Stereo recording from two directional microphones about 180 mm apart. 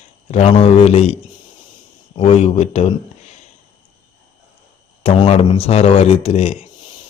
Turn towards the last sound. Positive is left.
turn(degrees=35)  # may be behind; listen again after turning